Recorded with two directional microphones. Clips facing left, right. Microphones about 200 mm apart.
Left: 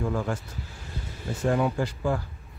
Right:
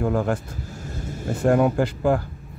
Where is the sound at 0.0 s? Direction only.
55° right (ahead or behind).